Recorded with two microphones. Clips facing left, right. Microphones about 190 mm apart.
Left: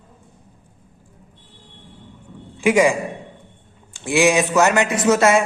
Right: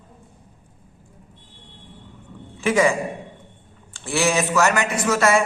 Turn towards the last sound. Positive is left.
turn(degrees=20)  # may be behind; listen again after turning